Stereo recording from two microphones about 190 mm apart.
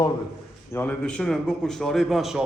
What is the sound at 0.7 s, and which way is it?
A man's voice, 10° left (ahead or behind).